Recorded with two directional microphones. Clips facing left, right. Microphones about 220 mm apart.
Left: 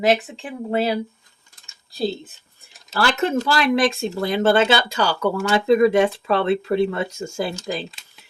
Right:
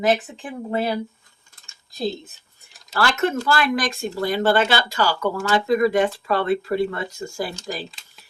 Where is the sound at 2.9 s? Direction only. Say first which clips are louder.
Left 1 dB; 25° left (ahead or behind).